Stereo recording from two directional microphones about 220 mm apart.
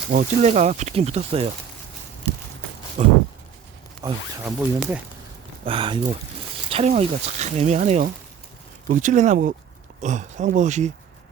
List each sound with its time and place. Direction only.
0.1 s speech: 35° right (ahead or behind)
3.0 s speech: 30° right (ahead or behind)
4.0 s speech: 15° right (ahead or behind)
4.4 s speech: 5° right (ahead or behind)
5.6 s speech: 25° right (ahead or behind)